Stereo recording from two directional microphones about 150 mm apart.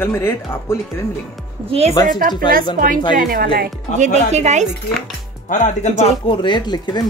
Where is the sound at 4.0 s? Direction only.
50° right (ahead or behind).